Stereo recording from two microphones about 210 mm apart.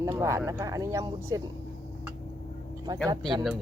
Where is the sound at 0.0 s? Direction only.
15° right (ahead or behind).